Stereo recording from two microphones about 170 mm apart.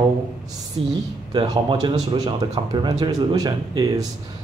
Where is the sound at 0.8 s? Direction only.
30° right (ahead or behind).